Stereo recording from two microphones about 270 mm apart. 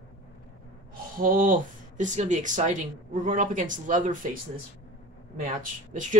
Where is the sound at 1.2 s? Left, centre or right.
Right.